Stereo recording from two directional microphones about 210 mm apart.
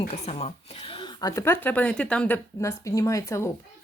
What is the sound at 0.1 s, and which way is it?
Speech, 30° left (ahead or behind).